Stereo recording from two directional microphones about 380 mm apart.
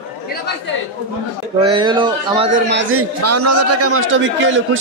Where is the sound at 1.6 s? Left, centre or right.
Centre.